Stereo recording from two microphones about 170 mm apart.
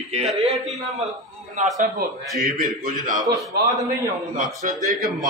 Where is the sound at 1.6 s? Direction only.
45° right (ahead or behind).